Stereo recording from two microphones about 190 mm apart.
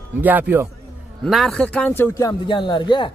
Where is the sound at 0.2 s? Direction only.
10° right (ahead or behind).